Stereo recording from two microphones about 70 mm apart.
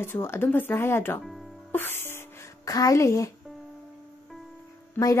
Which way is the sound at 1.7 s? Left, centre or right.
Left.